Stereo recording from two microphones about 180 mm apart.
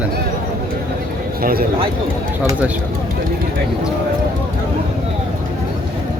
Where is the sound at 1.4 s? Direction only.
55° right (ahead or behind).